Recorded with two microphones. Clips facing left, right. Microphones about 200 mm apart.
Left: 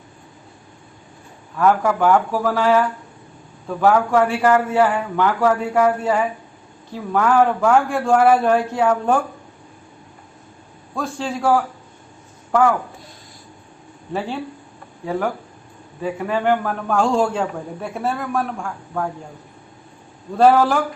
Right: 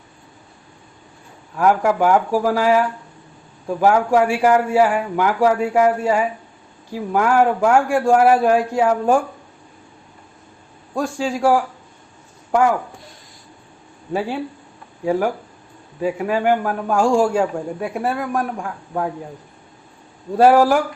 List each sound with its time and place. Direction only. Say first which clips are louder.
1.5 s a man's voice: right 1 dB; 10° right (ahead or behind)
3.8 s a man's voice: even; 15° right (ahead or behind)
10.9 s a man's voice: right 3 dB; 10° right (ahead or behind)
16.0 s a man's voice: right 1 dB; 10° right (ahead or behind)
20.4 s a man's voice: right 2 dB; 15° right (ahead or behind)